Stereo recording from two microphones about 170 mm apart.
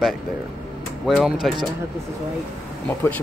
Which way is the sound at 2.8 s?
10° left (ahead or behind).